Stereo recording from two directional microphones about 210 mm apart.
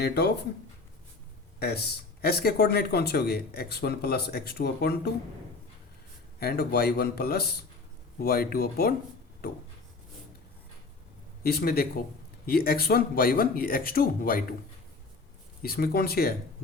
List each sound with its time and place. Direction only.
0.0 s speech: 50° left (ahead or behind)
1.5 s speech: 50° left (ahead or behind)
6.4 s speech: 50° left (ahead or behind)
11.4 s speech: 45° left (ahead or behind)
15.6 s speech: 45° left (ahead or behind)